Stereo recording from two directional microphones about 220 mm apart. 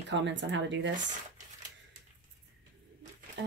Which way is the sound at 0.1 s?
55° right (ahead or behind).